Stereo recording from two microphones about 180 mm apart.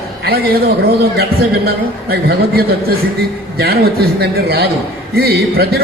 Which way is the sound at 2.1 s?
55° right (ahead or behind).